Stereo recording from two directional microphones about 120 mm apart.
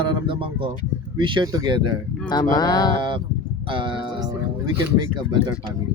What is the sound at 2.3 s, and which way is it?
Speech, 35° left (ahead or behind).